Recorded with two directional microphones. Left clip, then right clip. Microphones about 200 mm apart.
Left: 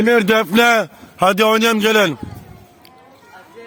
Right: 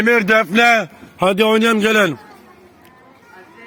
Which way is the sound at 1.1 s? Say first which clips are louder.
Left 1 dB; 45° left (ahead or behind).